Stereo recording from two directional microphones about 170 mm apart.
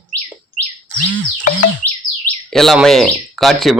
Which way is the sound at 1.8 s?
50° left (ahead or behind).